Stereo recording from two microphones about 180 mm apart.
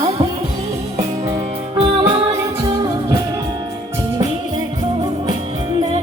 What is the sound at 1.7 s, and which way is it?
Music, 30° right (ahead or behind).